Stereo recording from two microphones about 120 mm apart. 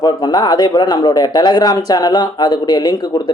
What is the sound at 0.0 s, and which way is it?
Speech, 35° left (ahead or behind).